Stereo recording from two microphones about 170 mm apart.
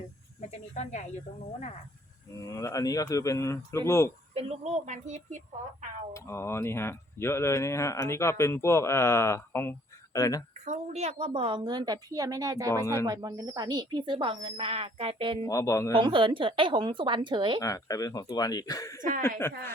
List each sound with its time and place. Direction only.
0.7 s speech: 45° left (ahead or behind)
2.5 s speech: 20° left (ahead or behind)
4.4 s speech: 40° right (ahead or behind)
6.1 s speech: 15° left (ahead or behind)
10.7 s speech: 40° right (ahead or behind); by 12.7 s 20° right (ahead or behind)
12.7 s speech: 15° left (ahead or behind)
13.1 s speech: 20° right (ahead or behind)
15.4 s speech: 20° left (ahead or behind)
16.0 s speech: 30° right (ahead or behind)
17.6 s speech: 20° left (ahead or behind)